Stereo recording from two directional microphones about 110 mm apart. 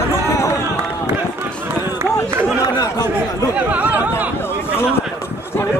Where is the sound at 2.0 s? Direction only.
25° right (ahead or behind).